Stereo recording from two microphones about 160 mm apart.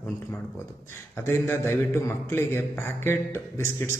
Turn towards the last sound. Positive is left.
turn(degrees=15)  # may be behind; listen again after turning